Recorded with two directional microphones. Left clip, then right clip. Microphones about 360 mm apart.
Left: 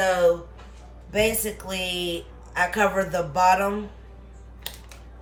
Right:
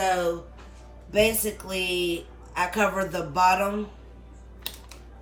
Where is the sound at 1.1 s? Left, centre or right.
Centre.